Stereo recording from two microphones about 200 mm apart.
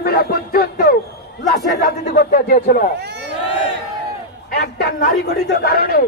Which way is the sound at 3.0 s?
60° right (ahead or behind).